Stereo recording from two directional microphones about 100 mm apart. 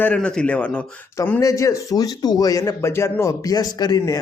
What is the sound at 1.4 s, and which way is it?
Speech, 35° left (ahead or behind).